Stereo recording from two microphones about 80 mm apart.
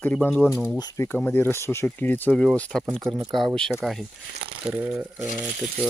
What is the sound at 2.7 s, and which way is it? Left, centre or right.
Speech, centre.